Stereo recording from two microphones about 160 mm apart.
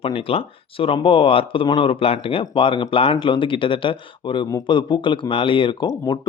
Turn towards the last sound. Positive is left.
turn(degrees=25)  # may be behind; listen again after turning